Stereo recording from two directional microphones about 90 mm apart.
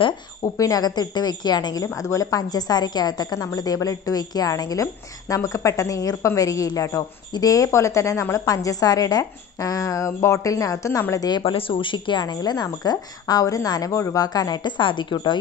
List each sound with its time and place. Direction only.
0.4 s a woman's voice: 40° left (ahead or behind)
11.2 s speech: 55° left (ahead or behind)
11.5 s speech: 85° left; by 14.7 s 45° left (ahead or behind)
14.8 s speech: 65° left (ahead or behind)